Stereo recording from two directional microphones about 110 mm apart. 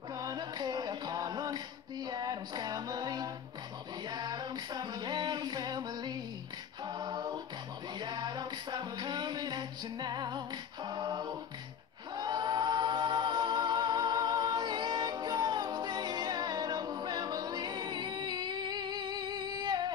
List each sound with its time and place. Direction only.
0.1 s music: 35° right (ahead or behind)
4.1 s female singing: 40° right (ahead or behind)
6.9 s a capella: 40° right (ahead or behind)
8.0 s music: 40° right (ahead or behind)
12.2 s a capella: 40° right (ahead or behind)